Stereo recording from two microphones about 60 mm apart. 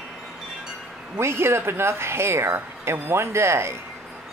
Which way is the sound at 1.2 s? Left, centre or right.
Right.